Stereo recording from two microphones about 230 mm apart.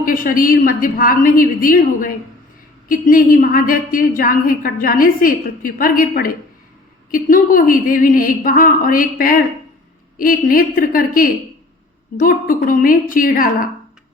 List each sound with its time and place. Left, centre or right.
0.0 s a woman's voice: left